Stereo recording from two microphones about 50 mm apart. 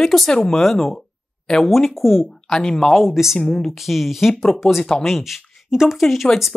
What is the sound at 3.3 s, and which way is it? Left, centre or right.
Speech, centre.